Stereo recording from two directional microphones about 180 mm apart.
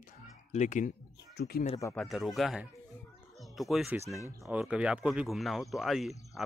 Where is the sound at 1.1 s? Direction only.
65° left (ahead or behind).